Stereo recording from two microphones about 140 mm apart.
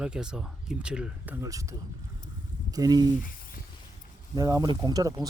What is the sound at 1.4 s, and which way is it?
Speech, 25° right (ahead or behind).